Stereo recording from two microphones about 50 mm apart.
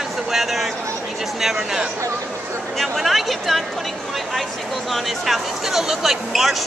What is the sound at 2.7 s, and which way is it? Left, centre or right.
Speech, centre.